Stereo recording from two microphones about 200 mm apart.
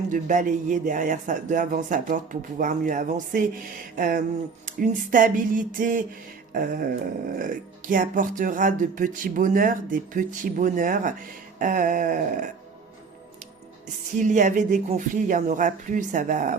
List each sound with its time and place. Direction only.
0.1 s speech: 40° right (ahead or behind)
14.1 s speech: 40° right (ahead or behind)